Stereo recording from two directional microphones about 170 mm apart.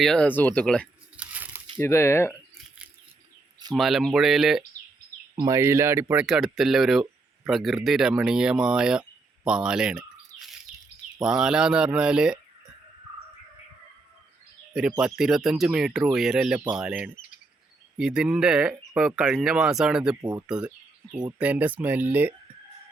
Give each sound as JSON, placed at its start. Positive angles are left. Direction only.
{"t": 0.0, "sound": "speech", "side_deg": 5}
{"t": 1.1, "sound": "a sound", "side_deg": -10}
{"t": 1.8, "sound": "speech", "side_deg": 15}
{"t": 3.8, "sound": "speech", "side_deg": 0}
{"t": 5.4, "sound": "speech", "side_deg": -20}
{"t": 6.2, "sound": "speech", "side_deg": 0}
{"t": 14.7, "sound": "speech", "side_deg": -5}
{"t": 17.2, "sound": "bird vocalization", "side_deg": 50}
{"t": 17.9, "sound": "speech", "side_deg": -5}